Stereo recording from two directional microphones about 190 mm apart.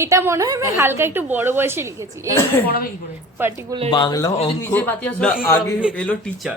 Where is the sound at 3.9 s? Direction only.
20° left (ahead or behind).